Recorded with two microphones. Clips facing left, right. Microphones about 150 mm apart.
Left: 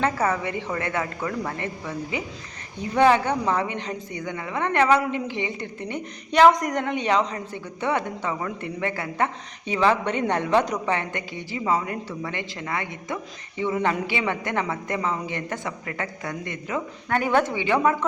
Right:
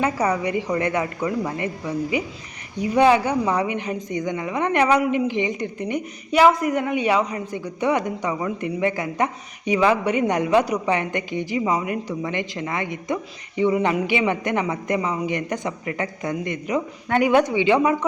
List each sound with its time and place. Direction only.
0.0 s a woman's voice: 15° right (ahead or behind)